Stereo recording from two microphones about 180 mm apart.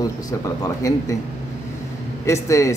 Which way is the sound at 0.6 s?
20° left (ahead or behind).